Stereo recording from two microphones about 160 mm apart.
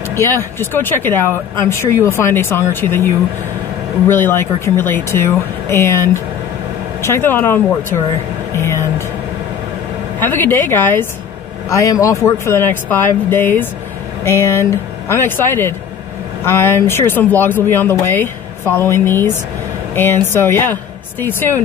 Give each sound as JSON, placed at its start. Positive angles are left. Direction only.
{"t": 0.1, "sound": "speech", "side_deg": 15}
{"t": 4.1, "sound": "speech", "side_deg": 15}
{"t": 10.2, "sound": "speech", "side_deg": 10}